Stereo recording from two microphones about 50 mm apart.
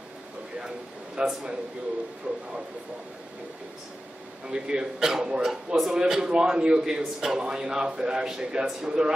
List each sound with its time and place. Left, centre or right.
0.6 s a man's voice: centre
4.5 s speech: centre